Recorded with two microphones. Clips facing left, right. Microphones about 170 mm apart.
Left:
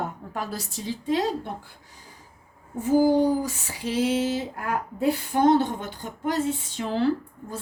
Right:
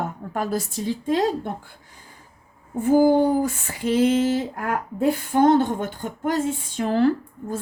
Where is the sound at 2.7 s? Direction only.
55° right (ahead or behind).